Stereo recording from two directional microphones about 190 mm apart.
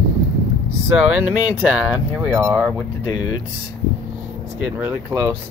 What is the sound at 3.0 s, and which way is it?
Speech, 20° left (ahead or behind).